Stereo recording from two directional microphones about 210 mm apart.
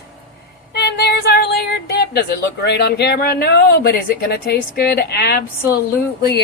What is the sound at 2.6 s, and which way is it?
Speech, 55° left (ahead or behind).